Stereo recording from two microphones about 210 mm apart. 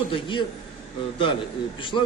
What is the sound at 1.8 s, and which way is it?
Speech, 25° left (ahead or behind).